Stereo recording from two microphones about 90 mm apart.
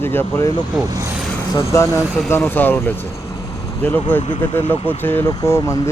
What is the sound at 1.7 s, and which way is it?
Speech, 30° left (ahead or behind).